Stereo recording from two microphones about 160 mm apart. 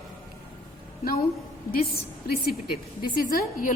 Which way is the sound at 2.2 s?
75° left (ahead or behind).